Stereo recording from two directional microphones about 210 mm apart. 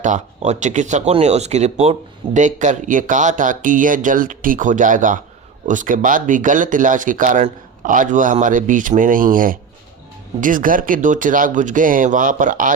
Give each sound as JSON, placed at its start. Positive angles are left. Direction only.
{"t": 0.0, "sound": "speech", "side_deg": -35}